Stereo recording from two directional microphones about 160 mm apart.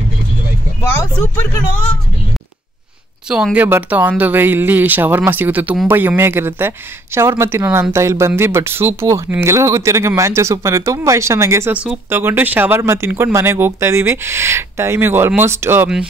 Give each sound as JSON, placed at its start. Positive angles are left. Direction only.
{"t": 3.3, "sound": "speech", "side_deg": -5}